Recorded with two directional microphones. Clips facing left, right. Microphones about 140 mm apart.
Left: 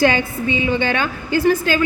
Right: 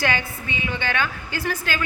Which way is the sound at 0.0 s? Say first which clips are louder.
Left 9 dB; 30° left (ahead or behind).